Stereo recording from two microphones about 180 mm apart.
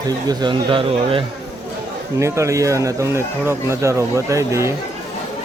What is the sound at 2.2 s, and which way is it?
Speech, 15° right (ahead or behind).